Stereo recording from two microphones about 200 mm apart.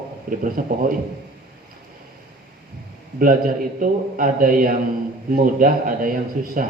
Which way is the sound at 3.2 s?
45° right (ahead or behind).